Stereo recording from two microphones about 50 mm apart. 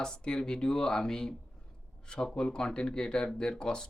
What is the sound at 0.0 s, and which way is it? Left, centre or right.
Speech, centre.